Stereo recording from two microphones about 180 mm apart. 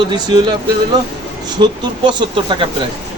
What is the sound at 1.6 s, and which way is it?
Speech, 25° right (ahead or behind).